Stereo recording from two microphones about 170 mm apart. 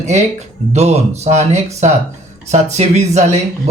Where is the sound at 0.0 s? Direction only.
40° right (ahead or behind).